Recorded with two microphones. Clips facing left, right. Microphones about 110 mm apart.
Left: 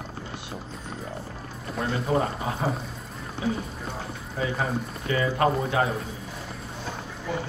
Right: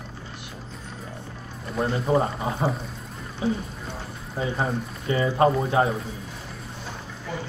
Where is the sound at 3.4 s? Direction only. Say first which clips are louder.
Right 2 dB; 30° right (ahead or behind).